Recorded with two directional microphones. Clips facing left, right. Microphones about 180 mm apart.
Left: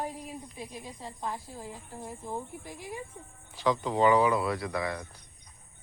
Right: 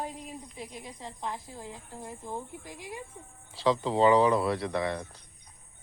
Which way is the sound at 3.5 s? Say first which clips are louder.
Right 2 dB; 25° right (ahead or behind).